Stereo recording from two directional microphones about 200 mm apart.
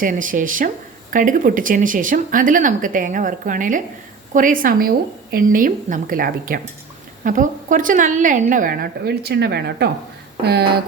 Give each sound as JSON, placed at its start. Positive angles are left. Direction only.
{"t": 0.0, "sound": "a woman's voice", "side_deg": -40}